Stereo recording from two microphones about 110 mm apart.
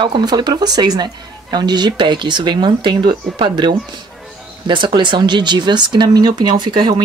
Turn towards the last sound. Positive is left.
turn(degrees=-45)  # may be behind; listen again after turning